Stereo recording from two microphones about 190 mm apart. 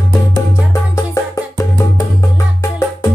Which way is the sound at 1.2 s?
15° left (ahead or behind).